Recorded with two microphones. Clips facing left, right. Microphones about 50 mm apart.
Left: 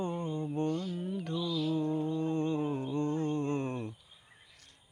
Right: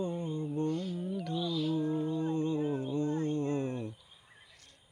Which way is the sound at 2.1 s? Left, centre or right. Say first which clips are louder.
Even; left.